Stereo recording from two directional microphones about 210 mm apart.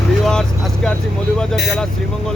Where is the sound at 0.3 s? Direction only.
5° left (ahead or behind).